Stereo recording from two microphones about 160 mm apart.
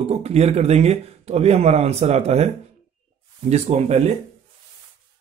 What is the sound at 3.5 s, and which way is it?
Speech, 40° right (ahead or behind).